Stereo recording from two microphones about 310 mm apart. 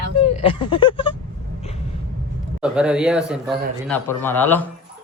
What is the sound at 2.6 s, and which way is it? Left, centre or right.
A man's voice, centre.